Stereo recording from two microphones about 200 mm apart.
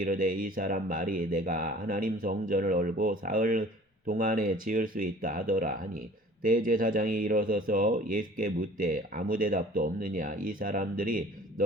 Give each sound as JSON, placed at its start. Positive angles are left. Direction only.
{"t": 0.0, "sound": "speech", "side_deg": -45}